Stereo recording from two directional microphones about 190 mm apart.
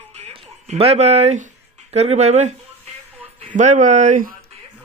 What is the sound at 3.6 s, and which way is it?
Speech, 40° right (ahead or behind).